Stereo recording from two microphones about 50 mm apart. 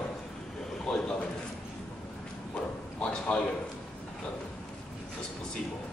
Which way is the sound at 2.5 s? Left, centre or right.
Left.